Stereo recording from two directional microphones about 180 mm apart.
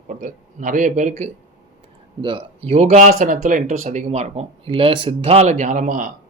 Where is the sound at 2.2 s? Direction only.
30° right (ahead or behind).